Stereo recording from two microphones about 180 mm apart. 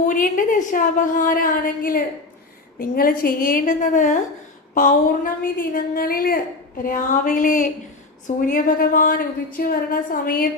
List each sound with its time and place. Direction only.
0.0 s a woman's voice: 45° left (ahead or behind)